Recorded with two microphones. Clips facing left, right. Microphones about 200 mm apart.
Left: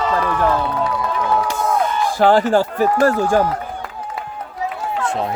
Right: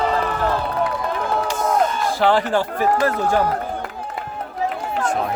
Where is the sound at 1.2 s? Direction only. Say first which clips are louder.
Left 4 dB; 50° right (ahead or behind).